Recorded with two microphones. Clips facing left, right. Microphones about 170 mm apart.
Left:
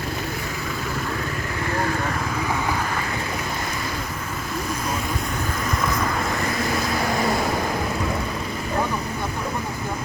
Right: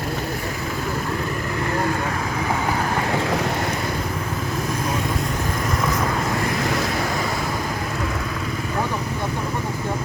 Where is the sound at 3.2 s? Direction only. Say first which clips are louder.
Right 6 dB; 90° right.